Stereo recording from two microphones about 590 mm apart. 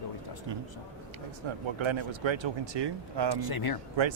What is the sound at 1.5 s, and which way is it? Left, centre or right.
Speech, right.